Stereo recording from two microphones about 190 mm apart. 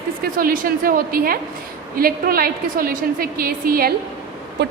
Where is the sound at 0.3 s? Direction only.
50° right (ahead or behind).